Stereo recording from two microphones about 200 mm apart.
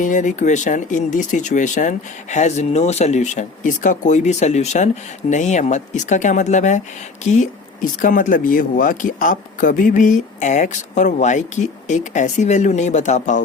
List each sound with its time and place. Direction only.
0.0 s speech: 40° left (ahead or behind)